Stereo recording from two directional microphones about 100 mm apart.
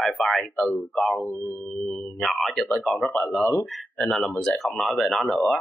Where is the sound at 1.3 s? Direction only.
25° left (ahead or behind).